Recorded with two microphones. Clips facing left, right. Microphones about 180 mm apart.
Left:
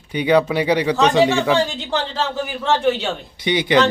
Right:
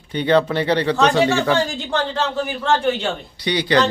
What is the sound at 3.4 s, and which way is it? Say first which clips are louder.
Speech: left 1 dB; 20° left (ahead or behind).